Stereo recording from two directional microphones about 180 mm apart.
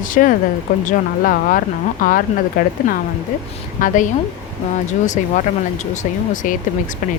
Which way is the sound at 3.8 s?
45° left (ahead or behind).